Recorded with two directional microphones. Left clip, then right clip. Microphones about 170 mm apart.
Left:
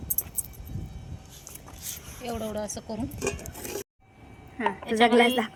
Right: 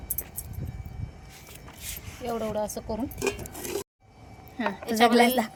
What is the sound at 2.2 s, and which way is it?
Speech, 20° right (ahead or behind).